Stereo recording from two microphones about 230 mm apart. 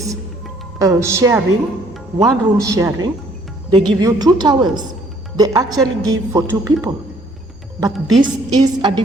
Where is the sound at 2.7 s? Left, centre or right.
Centre.